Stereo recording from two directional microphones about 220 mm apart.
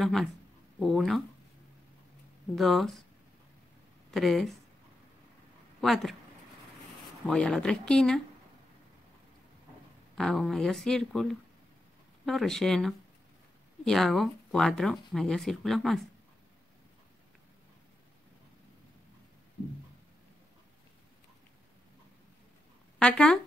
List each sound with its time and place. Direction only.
0.0 s speech: centre (ahead or behind)
2.5 s speech: centre (ahead or behind)
4.1 s speech: centre (ahead or behind)
5.8 s speech: centre (ahead or behind)
7.2 s speech: 5° left (ahead or behind)
10.1 s speech: centre (ahead or behind)
22.9 s speech: 5° left (ahead or behind)